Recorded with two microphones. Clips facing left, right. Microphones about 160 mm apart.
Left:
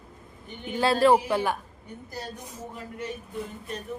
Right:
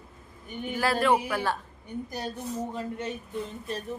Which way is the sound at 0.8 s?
30° left (ahead or behind).